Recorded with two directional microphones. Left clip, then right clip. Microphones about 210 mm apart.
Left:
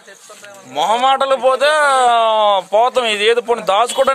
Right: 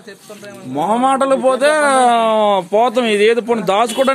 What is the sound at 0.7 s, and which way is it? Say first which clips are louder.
Speech: left 1 dB; 5° left (ahead or behind).